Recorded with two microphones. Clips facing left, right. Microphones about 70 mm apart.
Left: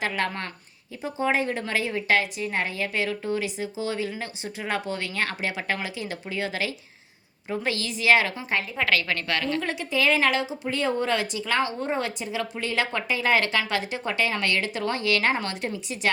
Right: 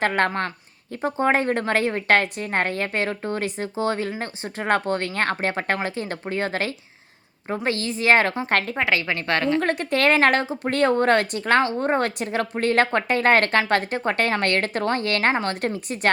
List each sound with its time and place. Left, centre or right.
0.0 s a woman's voice: right
8.4 s speech: right
8.8 s a woman's voice: right
9.6 s a woman's voice: right